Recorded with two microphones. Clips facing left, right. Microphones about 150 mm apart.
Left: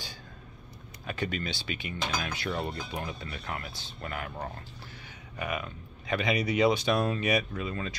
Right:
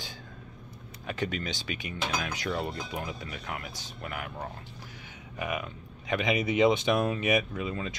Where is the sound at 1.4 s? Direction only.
15° right (ahead or behind).